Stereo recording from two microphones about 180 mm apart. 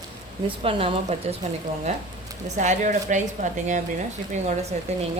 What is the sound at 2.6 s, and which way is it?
A woman's voice, 40° right (ahead or behind).